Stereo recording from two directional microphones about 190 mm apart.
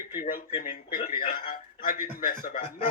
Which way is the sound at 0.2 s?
45° left (ahead or behind).